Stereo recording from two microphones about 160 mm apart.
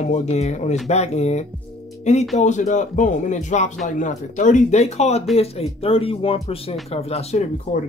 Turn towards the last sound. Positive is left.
turn(degrees=40)  # may be behind; listen again after turning